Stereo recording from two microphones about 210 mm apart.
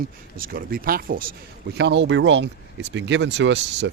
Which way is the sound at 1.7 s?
55° right (ahead or behind).